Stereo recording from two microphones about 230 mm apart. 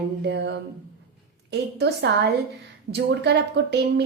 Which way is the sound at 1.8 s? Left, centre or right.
Right.